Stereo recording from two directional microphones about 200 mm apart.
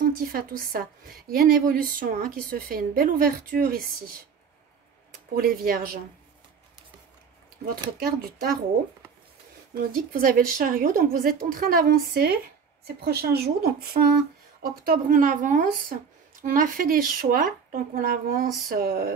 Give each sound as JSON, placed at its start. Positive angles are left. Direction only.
{"t": 0.0, "sound": "a woman's voice", "side_deg": -45}
{"t": 5.3, "sound": "a woman's voice", "side_deg": -50}
{"t": 8.0, "sound": "a woman's voice", "side_deg": -50}
{"t": 9.9, "sound": "a woman's voice", "side_deg": -45}